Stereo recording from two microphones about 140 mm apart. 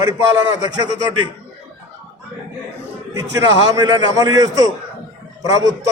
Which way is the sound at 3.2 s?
25° right (ahead or behind).